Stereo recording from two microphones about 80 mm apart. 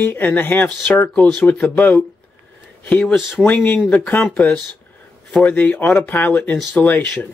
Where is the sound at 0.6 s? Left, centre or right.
Centre.